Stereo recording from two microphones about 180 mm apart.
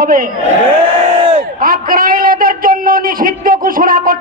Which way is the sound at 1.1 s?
25° right (ahead or behind).